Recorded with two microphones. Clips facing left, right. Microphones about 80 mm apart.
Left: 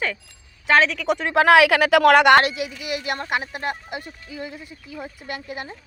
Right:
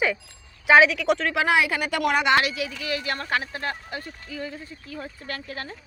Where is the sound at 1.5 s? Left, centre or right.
Left.